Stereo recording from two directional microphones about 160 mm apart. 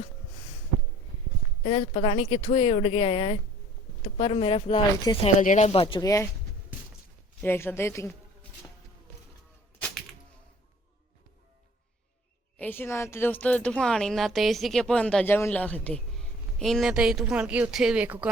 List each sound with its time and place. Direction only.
1.6 s speech: 35° left (ahead or behind)
5.1 s speech: 25° left (ahead or behind)
5.4 s speech: 50° left (ahead or behind)
6.0 s speech: 20° left (ahead or behind)
7.4 s speech: 15° left (ahead or behind)
12.5 s speech: 10° left (ahead or behind); by 18.3 s 10° right (ahead or behind)